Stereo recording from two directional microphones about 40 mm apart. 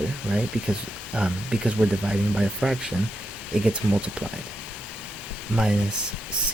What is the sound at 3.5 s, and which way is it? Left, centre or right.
Speech, right.